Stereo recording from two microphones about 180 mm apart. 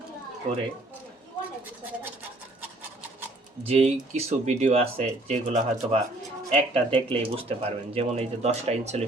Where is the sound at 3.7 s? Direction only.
35° right (ahead or behind).